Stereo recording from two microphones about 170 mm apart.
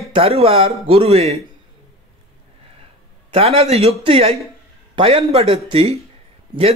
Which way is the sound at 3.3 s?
35° right (ahead or behind).